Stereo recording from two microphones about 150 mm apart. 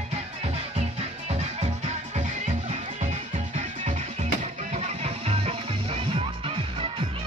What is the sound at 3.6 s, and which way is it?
Music, 50° right (ahead or behind).